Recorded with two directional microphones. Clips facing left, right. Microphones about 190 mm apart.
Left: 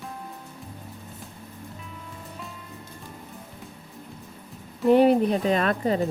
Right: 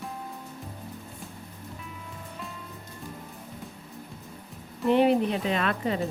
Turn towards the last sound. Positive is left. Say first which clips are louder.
# left 4 dB
turn(degrees=40)  # may be behind; listen again after turning